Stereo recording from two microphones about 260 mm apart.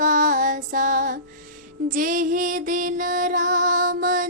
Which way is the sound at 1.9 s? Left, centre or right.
Right.